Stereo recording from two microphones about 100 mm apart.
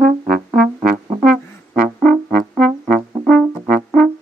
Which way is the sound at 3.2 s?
Centre (ahead or behind).